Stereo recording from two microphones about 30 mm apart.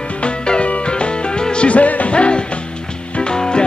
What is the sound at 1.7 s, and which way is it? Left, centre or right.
Music, left.